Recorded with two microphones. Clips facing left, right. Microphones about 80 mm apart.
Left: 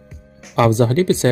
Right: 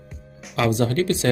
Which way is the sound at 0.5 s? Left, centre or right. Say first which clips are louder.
Left 6 dB; left.